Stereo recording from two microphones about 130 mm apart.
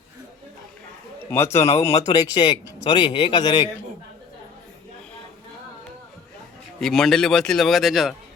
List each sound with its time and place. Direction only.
1.2 s a man's voice: 15° left (ahead or behind)
1.5 s speech: 55° left (ahead or behind)
2.0 s a man's voice: 25° left (ahead or behind)
6.7 s speech: 5° left (ahead or behind)